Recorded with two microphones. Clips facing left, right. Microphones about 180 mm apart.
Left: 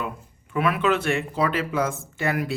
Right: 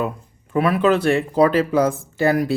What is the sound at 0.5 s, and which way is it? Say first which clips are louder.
Speech: right 5 dB; 35° right (ahead or behind).